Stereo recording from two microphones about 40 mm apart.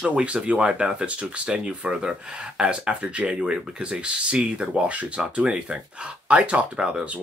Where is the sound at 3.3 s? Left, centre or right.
Right.